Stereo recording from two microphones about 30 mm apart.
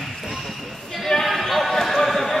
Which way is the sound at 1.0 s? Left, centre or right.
Centre.